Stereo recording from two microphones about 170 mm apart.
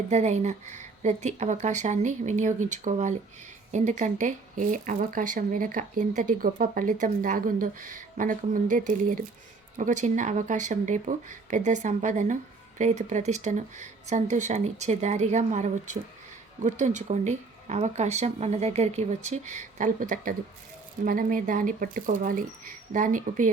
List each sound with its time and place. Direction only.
0.1 s speech: 40° right (ahead or behind)